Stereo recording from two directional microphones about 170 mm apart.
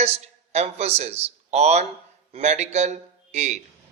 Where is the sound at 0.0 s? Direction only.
40° right (ahead or behind).